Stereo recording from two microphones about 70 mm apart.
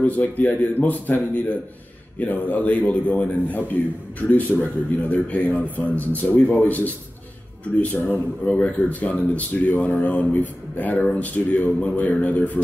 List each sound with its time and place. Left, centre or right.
0.0 s speech: left
4.5 s a man's voice: centre
5.1 s speech: left